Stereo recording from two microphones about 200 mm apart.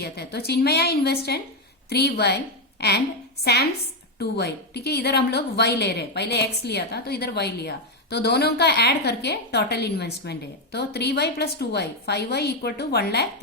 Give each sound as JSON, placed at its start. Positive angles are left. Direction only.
{"t": 0.0, "sound": "a woman's voice", "side_deg": 55}